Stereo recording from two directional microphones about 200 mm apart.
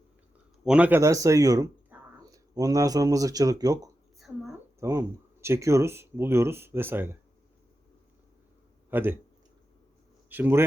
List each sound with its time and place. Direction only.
0.6 s speech: 5° right (ahead or behind)
8.9 s a man's voice: 10° right (ahead or behind)
10.2 s a man's voice: 10° right (ahead or behind)